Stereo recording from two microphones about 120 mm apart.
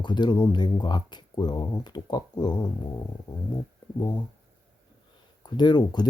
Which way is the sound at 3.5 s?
35° left (ahead or behind).